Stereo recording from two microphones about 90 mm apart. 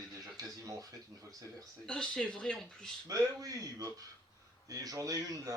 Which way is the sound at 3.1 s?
40° right (ahead or behind).